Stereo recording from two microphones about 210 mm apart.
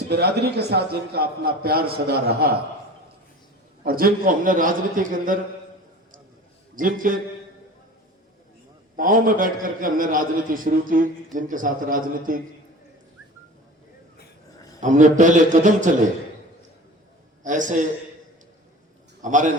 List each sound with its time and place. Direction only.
0.1 s a man's voice: 50° right (ahead or behind)
3.8 s a man's voice: 45° right (ahead or behind)
6.7 s a man's voice: 40° right (ahead or behind)
9.0 s a man's voice: 40° right (ahead or behind)
14.8 s a man's voice: 35° right (ahead or behind)
17.4 s a man's voice: 35° right (ahead or behind)
19.2 s a man's voice: 35° right (ahead or behind)